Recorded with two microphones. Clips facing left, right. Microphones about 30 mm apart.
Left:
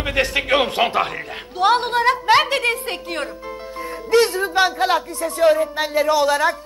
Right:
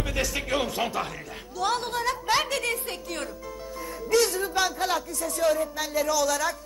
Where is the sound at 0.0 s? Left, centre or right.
Left.